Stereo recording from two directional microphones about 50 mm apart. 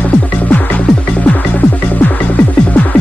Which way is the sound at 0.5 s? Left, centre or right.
Left.